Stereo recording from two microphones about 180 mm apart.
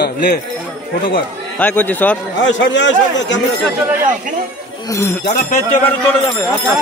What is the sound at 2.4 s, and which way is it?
Speech, 90° left.